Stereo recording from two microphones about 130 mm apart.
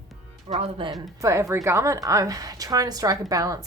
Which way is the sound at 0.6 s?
40° right (ahead or behind).